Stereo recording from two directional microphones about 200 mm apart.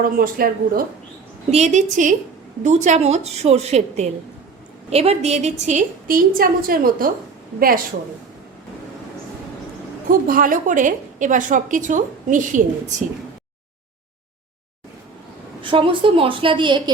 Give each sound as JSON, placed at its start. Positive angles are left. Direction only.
{"t": 0.0, "sound": "speech", "side_deg": -45}
{"t": 1.5, "sound": "a woman's voice", "side_deg": -35}
{"t": 10.1, "sound": "a woman's voice", "side_deg": -45}
{"t": 15.6, "sound": "a woman's voice", "side_deg": -25}